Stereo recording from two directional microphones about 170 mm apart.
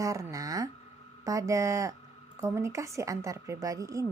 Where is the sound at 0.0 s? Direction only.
20° right (ahead or behind).